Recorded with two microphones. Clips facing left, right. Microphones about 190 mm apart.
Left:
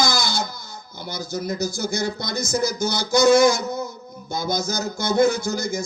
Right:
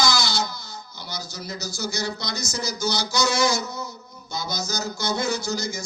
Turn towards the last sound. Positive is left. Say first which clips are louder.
# left 3 dB
turn(degrees=55)  # may be behind; listen again after turning